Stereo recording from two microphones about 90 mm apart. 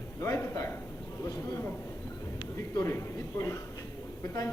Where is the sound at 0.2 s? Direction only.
35° left (ahead or behind).